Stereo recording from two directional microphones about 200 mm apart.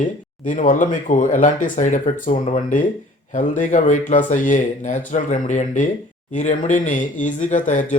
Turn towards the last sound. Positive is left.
turn(degrees=40)  # may be behind; listen again after turning